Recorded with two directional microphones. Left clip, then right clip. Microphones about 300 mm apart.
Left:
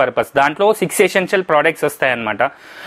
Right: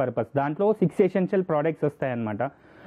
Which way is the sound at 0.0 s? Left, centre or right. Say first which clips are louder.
Left 12 dB; centre.